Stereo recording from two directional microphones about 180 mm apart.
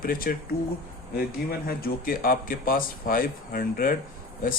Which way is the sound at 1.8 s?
55° left (ahead or behind).